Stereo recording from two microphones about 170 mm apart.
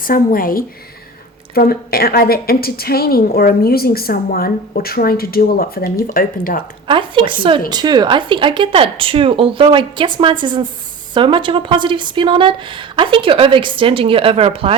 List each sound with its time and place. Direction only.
0.0 s a woman's voice: 55° left (ahead or behind)
6.8 s speech: 30° right (ahead or behind)